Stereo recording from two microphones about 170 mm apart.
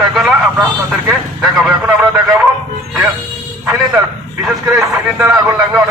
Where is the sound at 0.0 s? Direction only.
Centre (ahead or behind).